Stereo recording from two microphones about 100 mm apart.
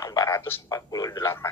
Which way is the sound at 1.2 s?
25° left (ahead or behind).